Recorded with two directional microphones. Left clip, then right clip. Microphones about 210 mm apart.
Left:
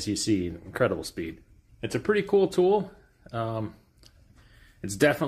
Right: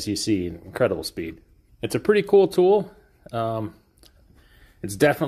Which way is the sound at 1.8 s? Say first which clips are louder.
Right 6 dB; 45° right (ahead or behind).